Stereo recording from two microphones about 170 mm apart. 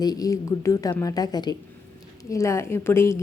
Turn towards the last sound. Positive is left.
turn(degrees=15)  # may be behind; listen again after turning